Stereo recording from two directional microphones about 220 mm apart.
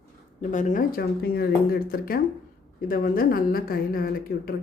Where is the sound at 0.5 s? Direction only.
35° left (ahead or behind).